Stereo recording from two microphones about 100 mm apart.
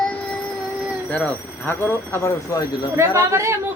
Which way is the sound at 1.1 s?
15° left (ahead or behind).